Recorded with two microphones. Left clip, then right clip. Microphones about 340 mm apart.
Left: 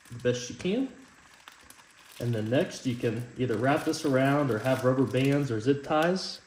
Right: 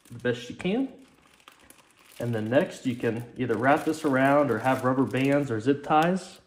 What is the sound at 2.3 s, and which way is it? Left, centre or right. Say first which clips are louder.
Speech: right 3 dB; centre.